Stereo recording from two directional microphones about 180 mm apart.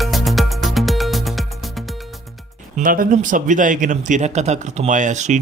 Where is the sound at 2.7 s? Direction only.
50° right (ahead or behind).